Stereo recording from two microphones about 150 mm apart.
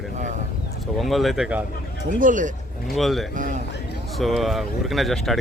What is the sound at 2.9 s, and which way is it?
Speech, centre (ahead or behind).